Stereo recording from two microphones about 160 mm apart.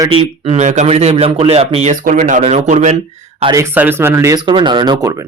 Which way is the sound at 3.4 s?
20° right (ahead or behind).